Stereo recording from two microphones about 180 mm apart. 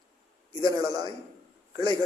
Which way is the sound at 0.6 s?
20° right (ahead or behind).